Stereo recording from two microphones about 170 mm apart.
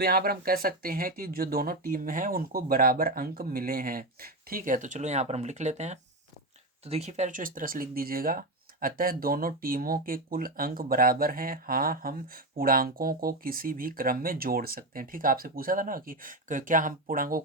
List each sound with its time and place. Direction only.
0.0 s speech: 65° right (ahead or behind)